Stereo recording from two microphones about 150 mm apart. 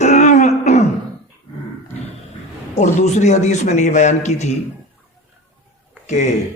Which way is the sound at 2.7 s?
50° left (ahead or behind).